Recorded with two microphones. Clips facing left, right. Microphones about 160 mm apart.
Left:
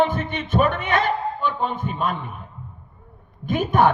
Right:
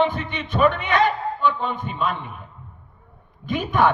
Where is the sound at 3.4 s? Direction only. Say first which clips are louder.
Left 2 dB; 45° left (ahead or behind).